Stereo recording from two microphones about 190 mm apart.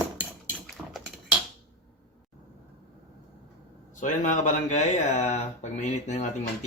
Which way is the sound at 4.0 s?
40° left (ahead or behind).